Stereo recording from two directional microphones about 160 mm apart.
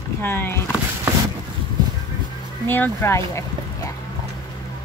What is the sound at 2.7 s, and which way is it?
Speech, 15° left (ahead or behind).